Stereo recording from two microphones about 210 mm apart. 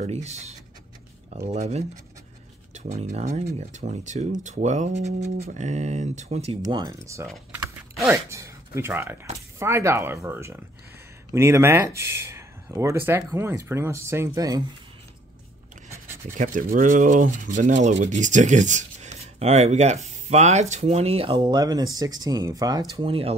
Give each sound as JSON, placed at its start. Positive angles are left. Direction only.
{"t": 0.0, "sound": "rub", "side_deg": -30}
{"t": 6.6, "sound": "speech", "side_deg": -20}
{"t": 16.3, "sound": "rub", "side_deg": -40}
{"t": 21.9, "sound": "speech", "side_deg": -20}